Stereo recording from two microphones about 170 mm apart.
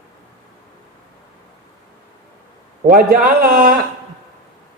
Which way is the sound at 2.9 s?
60° right (ahead or behind).